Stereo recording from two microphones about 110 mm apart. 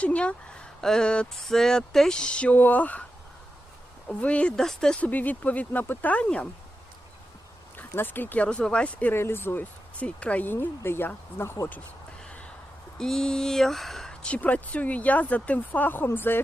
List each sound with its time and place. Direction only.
0.0 s speech: 10° left (ahead or behind)
4.1 s speech: 10° left (ahead or behind)
7.8 s speech: 20° left (ahead or behind)
12.2 s a sound: 10° left (ahead or behind)
13.0 s speech: 5° left (ahead or behind)